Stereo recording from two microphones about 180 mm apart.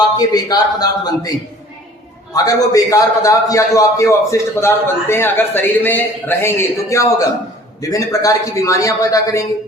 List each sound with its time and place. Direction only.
0.2 s a man's voice: 20° left (ahead or behind)
2.3 s a man's voice: 20° left (ahead or behind)